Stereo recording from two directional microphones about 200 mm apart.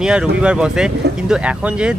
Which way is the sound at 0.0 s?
5° right (ahead or behind).